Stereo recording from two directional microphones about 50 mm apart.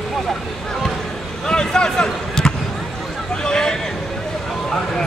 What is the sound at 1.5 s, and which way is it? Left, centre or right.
Basketball bounce, centre.